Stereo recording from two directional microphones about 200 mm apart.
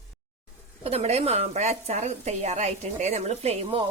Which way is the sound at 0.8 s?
30° right (ahead or behind).